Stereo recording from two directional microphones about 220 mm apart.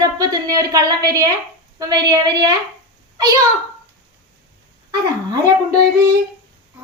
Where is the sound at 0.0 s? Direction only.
15° right (ahead or behind).